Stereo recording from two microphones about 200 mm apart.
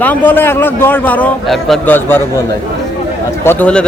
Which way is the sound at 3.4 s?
10° left (ahead or behind).